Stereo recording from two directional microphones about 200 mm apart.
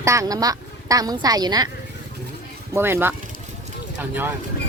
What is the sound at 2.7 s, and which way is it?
Speech, 10° right (ahead or behind).